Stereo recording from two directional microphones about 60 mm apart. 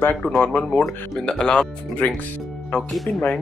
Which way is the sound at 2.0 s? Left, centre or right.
Left.